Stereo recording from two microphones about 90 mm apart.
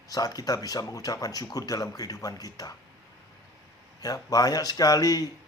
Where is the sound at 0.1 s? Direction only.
45° left (ahead or behind).